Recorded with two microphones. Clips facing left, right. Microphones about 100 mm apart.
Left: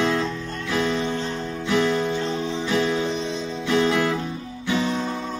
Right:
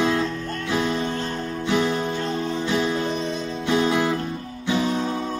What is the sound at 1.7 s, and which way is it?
Music, 15° right (ahead or behind).